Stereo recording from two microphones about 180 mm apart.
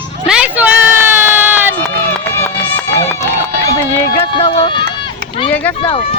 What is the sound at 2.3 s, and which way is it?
Run, 15° left (ahead or behind).